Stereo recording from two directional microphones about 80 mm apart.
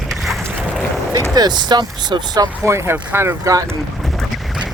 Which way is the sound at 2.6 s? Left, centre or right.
Right.